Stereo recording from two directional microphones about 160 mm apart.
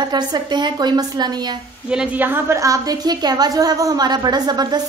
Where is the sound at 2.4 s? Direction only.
20° right (ahead or behind).